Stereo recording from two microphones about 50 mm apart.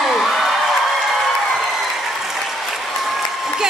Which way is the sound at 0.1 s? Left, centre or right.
Centre.